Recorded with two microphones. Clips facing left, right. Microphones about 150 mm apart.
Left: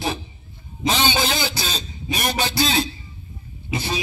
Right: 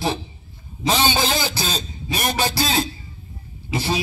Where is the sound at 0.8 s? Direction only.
40° right (ahead or behind).